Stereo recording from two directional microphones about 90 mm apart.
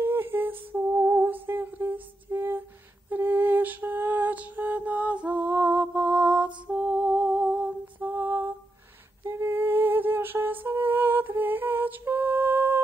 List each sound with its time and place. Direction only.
0.0 s humming: 25° right (ahead or behind)
3.1 s lullaby: 20° right (ahead or behind)
9.2 s humming: 30° right (ahead or behind)